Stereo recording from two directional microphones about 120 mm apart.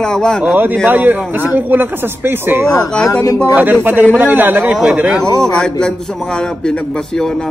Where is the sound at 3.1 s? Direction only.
30° left (ahead or behind).